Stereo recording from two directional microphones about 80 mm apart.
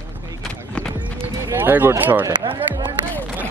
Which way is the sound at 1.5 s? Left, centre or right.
Right.